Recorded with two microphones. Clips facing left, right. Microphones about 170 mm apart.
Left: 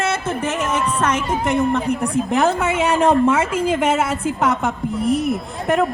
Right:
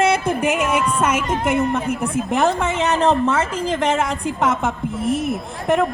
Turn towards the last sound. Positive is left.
turn(degrees=0)  # may be behind; listen again after turning